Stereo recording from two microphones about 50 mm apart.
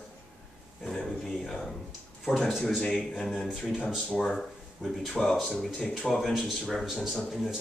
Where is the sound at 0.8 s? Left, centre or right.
Centre.